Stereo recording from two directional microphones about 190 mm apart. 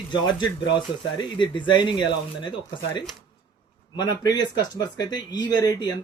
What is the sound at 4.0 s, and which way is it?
Speech, 20° left (ahead or behind).